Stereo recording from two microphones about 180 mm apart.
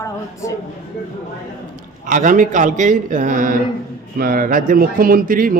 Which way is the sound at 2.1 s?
45° right (ahead or behind).